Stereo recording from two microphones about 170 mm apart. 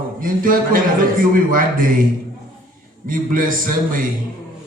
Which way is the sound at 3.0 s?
55° right (ahead or behind).